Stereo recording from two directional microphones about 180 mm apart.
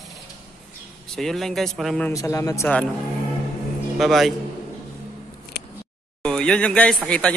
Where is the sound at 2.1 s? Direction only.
15° left (ahead or behind).